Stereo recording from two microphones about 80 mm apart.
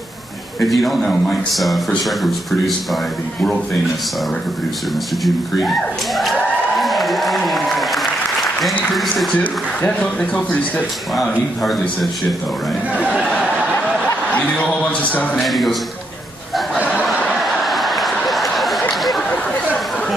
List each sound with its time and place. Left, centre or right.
0.6 s speech: centre
5.2 s speech: centre
6.8 s applause: centre
9.4 s speech: centre
11.1 s speech: centre
14.5 s speech: centre
15.4 s speech: centre
16.9 s a sound: centre